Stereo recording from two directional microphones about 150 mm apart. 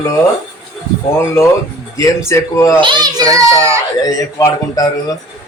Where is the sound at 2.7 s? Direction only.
30° right (ahead or behind).